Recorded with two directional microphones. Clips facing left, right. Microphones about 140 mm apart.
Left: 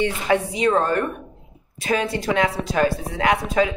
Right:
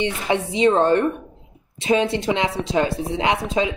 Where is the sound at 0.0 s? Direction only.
25° right (ahead or behind).